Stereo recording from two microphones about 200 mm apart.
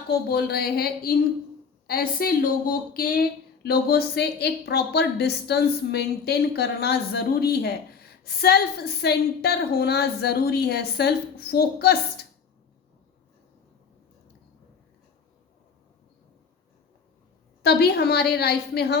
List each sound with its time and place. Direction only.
0.1 s speech: 50° left (ahead or behind)
17.6 s speech: 50° left (ahead or behind)